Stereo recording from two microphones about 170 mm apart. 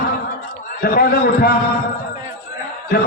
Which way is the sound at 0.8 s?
65° left (ahead or behind).